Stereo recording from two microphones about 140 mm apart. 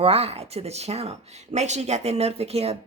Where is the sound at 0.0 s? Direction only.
45° right (ahead or behind).